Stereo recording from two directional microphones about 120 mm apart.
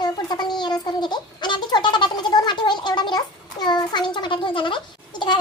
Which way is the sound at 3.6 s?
35° left (ahead or behind).